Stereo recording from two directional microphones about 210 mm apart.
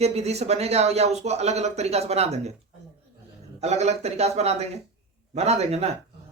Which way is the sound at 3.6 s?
30° right (ahead or behind).